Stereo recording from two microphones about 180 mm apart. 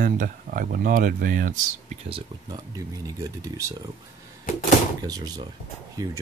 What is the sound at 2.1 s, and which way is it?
Speech, 25° right (ahead or behind).